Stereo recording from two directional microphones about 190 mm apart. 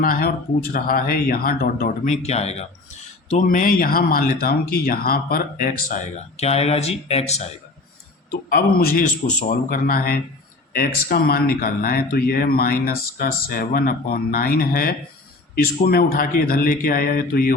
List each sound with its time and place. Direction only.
0.0 s speech: 50° left (ahead or behind); by 7.4 s 35° left (ahead or behind)
8.3 s speech: 55° left (ahead or behind)